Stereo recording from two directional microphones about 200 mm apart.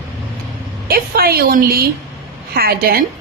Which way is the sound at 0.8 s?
50° right (ahead or behind).